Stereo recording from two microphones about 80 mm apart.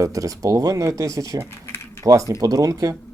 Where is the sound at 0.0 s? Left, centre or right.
Right.